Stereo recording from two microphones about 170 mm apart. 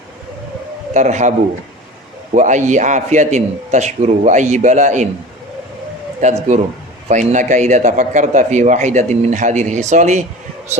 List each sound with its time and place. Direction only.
0.9 s a man's voice: 45° right (ahead or behind)
2.3 s a man's voice: 45° right (ahead or behind)
6.1 s a man's voice: 45° right (ahead or behind)